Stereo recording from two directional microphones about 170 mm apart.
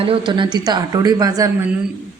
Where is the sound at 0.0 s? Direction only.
30° right (ahead or behind).